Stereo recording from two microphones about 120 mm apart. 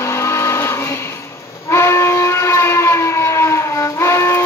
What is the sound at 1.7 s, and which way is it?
Train, 20° left (ahead or behind).